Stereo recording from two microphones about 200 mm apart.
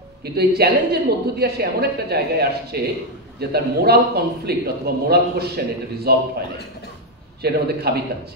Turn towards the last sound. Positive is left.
turn(degrees=-50)  # may be behind; listen again after turning